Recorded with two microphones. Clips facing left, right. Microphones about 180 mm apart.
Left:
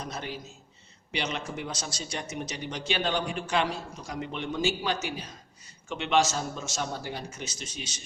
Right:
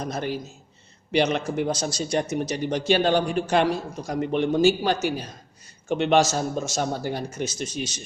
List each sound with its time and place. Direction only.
0.0 s speech: 45° right (ahead or behind)